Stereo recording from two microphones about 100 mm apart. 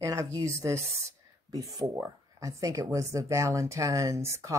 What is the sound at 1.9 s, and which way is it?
Speech, 35° right (ahead or behind).